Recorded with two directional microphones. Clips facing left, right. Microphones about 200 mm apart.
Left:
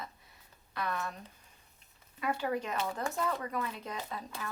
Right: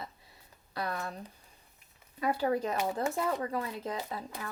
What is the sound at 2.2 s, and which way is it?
Speech, 35° right (ahead or behind).